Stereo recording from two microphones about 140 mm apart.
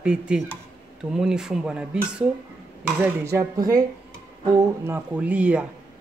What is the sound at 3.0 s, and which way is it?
Speech, 15° right (ahead or behind).